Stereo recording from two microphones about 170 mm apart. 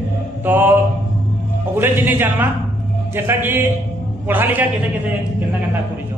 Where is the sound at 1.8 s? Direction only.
10° right (ahead or behind).